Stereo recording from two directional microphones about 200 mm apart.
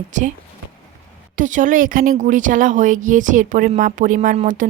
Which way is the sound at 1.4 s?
40° right (ahead or behind).